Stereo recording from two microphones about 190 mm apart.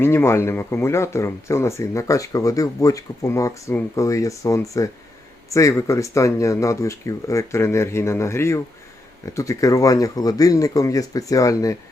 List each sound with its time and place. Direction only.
0.0 s speech: 10° left (ahead or behind)